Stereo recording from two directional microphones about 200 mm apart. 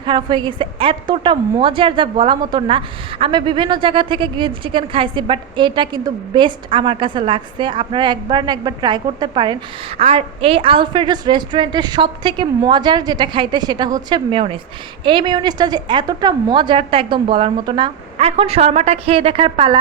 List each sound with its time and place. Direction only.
0.0 s a woman's voice: 25° right (ahead or behind)